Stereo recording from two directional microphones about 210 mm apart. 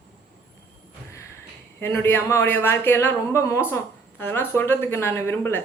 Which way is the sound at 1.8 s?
10° left (ahead or behind).